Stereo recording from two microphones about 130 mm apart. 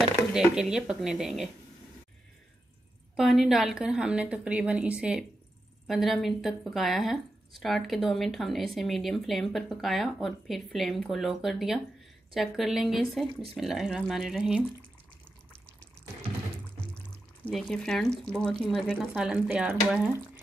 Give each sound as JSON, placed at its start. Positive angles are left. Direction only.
{"t": 0.3, "sound": "speech", "side_deg": -5}
{"t": 3.2, "sound": "speech", "side_deg": 0}
{"t": 17.5, "sound": "speech", "side_deg": 5}